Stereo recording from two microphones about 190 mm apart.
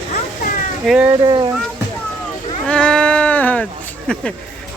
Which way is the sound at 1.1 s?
25° right (ahead or behind).